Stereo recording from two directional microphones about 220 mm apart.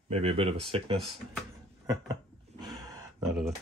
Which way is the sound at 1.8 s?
15° right (ahead or behind).